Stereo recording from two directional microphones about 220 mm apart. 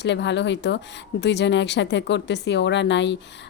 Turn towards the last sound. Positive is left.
turn(degrees=55)  # may be behind; listen again after turning